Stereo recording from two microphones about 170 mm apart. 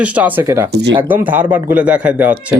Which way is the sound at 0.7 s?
80° right.